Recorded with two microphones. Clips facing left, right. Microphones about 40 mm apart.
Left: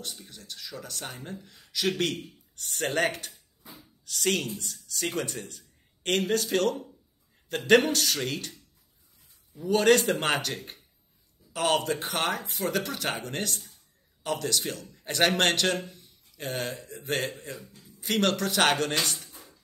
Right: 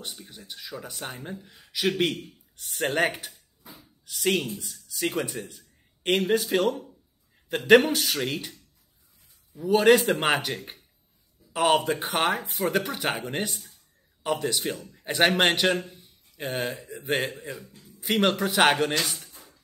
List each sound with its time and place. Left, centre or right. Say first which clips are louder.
0.0 s a man's voice: right 1 dB; centre
19.3 s music: left 1 dB; centre